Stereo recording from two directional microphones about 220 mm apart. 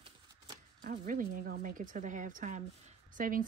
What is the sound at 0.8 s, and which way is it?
A woman's voice, 40° right (ahead or behind).